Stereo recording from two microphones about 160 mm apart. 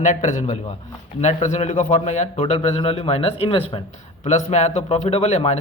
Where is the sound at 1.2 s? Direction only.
45° left (ahead or behind).